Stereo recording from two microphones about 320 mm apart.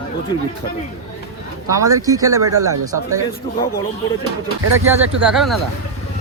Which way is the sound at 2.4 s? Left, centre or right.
Right.